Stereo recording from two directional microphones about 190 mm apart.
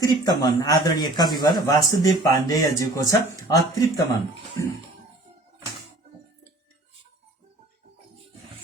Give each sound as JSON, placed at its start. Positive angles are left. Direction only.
{"t": 0.0, "sound": "speech", "side_deg": 20}